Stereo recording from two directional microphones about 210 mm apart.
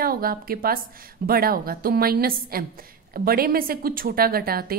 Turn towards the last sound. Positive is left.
turn(degrees=-45)  # may be behind; listen again after turning